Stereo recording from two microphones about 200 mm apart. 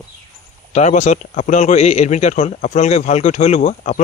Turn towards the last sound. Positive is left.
turn(degrees=35)  # may be behind; listen again after turning